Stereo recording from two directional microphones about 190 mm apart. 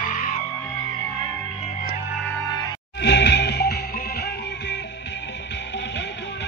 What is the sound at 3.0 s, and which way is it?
Music, 65° left (ahead or behind).